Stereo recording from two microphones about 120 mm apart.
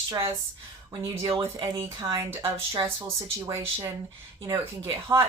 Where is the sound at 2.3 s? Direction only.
20° right (ahead or behind).